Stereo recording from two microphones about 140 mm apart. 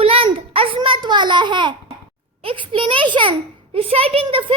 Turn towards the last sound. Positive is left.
turn(degrees=-40)  # may be behind; listen again after turning